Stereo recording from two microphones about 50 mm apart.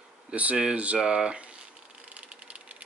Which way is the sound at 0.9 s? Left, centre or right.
Centre.